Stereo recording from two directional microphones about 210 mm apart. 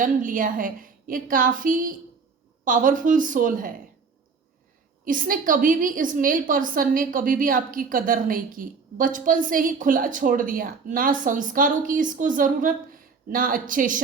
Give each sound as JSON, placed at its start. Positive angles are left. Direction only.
{"t": 0.0, "sound": "a woman's voice", "side_deg": -40}
{"t": 5.0, "sound": "a woman's voice", "side_deg": -40}